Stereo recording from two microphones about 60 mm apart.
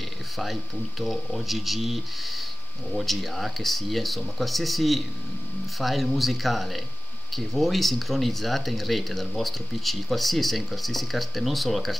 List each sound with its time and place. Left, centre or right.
0.4 s speech: centre